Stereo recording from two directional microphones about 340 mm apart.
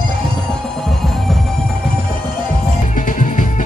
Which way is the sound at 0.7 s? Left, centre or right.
Centre.